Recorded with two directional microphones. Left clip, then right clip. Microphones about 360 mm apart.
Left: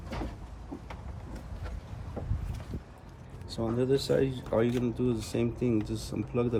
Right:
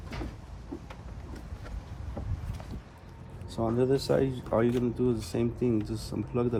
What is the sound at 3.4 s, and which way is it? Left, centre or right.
Speech, centre.